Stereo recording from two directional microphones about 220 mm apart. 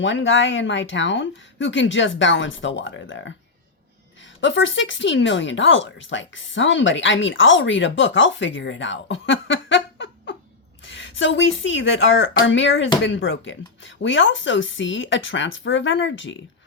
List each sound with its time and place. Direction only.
0.0 s speech: 55° left (ahead or behind)
4.4 s speech: 55° left (ahead or behind)